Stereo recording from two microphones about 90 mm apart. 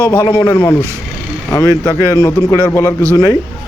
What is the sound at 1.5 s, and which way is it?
Speech, 40° left (ahead or behind).